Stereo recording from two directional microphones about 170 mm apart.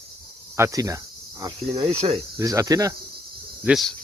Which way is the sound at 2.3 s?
20° right (ahead or behind).